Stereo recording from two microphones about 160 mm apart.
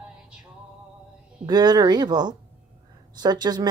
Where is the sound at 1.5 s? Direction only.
25° right (ahead or behind).